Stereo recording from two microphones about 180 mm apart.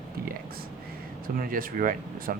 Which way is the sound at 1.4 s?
50° right (ahead or behind).